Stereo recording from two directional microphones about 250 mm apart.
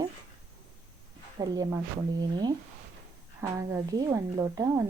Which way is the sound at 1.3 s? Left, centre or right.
Centre.